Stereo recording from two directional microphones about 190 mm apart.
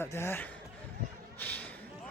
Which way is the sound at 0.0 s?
15° left (ahead or behind).